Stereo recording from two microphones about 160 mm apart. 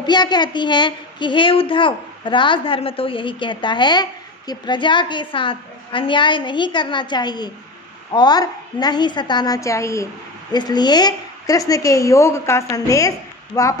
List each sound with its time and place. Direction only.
0.0 s a woman's voice: 25° left (ahead or behind)